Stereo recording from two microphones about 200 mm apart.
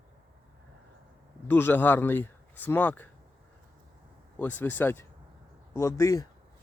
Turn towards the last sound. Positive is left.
turn(degrees=15)  # may be behind; listen again after turning